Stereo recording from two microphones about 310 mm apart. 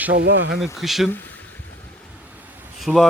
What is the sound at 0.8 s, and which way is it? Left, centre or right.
Speech, centre.